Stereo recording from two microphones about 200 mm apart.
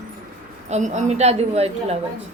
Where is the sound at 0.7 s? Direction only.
35° right (ahead or behind).